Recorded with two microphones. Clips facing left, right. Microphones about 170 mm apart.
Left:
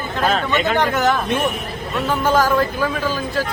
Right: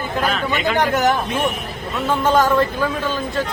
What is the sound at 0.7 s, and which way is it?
Speech, 15° right (ahead or behind).